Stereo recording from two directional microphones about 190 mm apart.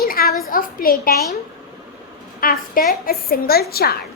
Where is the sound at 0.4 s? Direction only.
50° left (ahead or behind).